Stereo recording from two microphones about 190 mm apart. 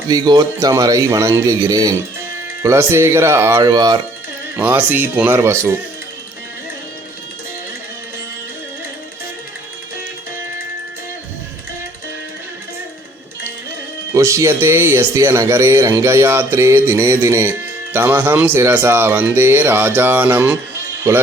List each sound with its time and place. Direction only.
0.1 s speech: 20° right (ahead or behind)
4.5 s speech: 10° right (ahead or behind)
14.1 s speech: 15° right (ahead or behind)